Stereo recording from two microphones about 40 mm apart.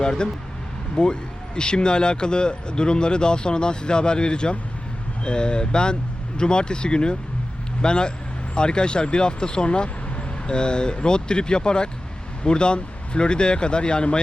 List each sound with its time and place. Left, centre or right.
0.0 s speech: centre